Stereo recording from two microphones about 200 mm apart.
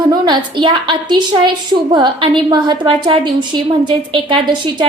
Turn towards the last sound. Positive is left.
turn(degrees=-25)  # may be behind; listen again after turning